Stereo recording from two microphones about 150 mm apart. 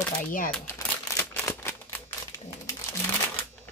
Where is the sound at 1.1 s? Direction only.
15° left (ahead or behind).